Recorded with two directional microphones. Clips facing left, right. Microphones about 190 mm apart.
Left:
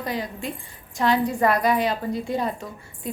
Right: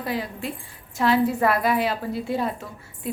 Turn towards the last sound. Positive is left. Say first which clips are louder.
# even
turn(degrees=-5)  # may be behind; listen again after turning